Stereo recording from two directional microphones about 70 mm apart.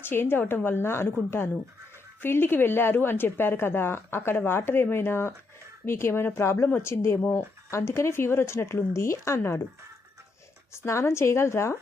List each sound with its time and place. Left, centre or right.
0.0 s a woman's voice: left
2.2 s a woman's voice: left
7.2 s speech: left
7.7 s a woman's voice: left
10.8 s a woman's voice: left